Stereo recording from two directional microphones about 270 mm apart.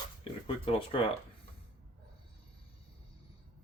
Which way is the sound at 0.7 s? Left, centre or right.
Centre.